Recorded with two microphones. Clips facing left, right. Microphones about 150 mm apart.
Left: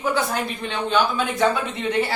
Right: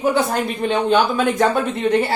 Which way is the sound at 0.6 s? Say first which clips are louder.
Right 6 dB; 50° right (ahead or behind).